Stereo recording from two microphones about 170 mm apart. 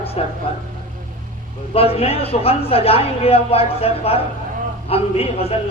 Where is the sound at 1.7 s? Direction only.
35° left (ahead or behind).